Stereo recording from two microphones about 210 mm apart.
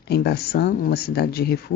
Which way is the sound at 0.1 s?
50° left (ahead or behind).